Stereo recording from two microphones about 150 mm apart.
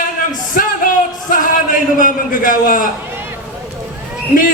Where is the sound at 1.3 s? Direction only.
65° left (ahead or behind).